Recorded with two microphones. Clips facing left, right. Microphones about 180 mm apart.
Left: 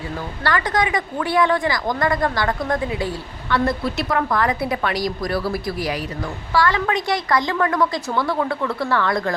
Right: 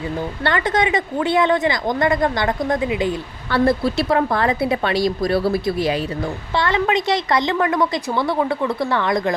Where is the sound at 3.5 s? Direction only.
30° right (ahead or behind).